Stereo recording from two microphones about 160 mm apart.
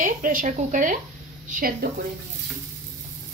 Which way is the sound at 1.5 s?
65° right (ahead or behind).